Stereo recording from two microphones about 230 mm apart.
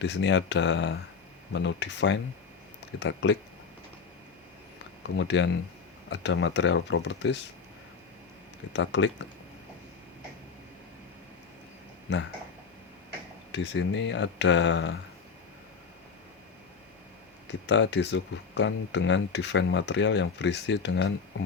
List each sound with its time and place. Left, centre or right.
0.0 s speech: left
5.0 s speech: left
8.7 s speech: left
13.5 s speech: left
17.7 s speech: left